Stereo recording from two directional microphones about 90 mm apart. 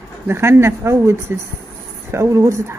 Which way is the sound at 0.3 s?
30° right (ahead or behind).